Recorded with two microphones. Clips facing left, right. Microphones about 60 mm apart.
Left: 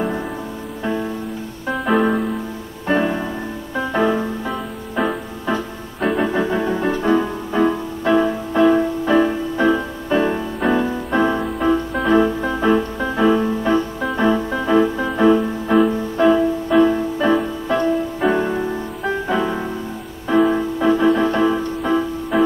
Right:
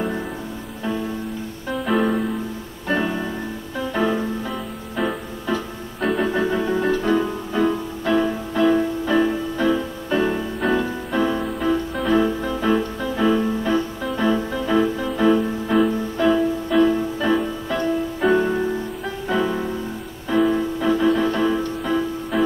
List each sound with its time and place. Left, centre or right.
1.9 s music: centre
2.9 s music: centre
5.9 s keyboard: centre
6.2 s music: centre